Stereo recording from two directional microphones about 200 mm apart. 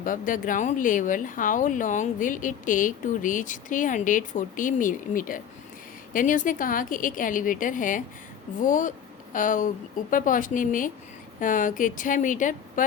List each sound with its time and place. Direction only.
0.0 s speech: 40° left (ahead or behind)